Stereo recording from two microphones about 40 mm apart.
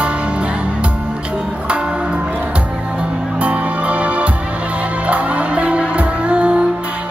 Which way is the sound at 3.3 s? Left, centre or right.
Right.